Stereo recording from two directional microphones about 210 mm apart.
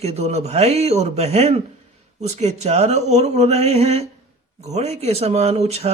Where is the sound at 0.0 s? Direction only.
30° right (ahead or behind).